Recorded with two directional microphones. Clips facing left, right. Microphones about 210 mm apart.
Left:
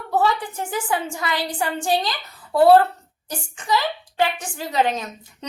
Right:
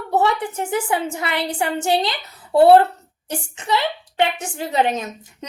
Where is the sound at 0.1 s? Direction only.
20° right (ahead or behind).